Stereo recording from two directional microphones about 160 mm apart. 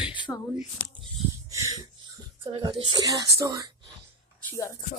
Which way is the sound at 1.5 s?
20° right (ahead or behind).